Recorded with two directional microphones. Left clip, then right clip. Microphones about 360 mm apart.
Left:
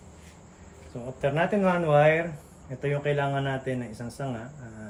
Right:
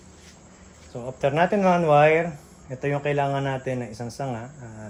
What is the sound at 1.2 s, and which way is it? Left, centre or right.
Speech, right.